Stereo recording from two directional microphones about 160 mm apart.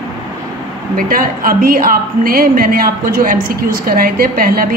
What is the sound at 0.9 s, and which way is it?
A woman's voice, 60° right (ahead or behind).